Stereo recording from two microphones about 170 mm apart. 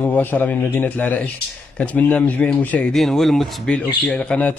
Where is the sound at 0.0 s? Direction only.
10° left (ahead or behind).